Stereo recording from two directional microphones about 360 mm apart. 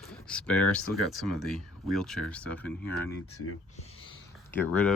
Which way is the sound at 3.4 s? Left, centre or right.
Left.